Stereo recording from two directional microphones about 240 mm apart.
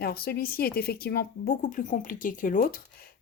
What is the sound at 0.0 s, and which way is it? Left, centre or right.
Speech, left.